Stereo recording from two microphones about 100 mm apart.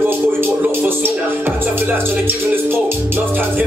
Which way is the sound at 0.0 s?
20° right (ahead or behind).